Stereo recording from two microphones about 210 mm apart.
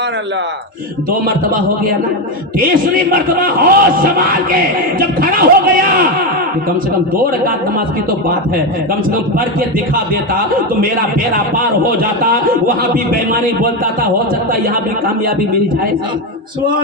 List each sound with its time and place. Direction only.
3.1 s a man's voice: 45° right (ahead or behind)
12.2 s a man's voice: 45° right (ahead or behind)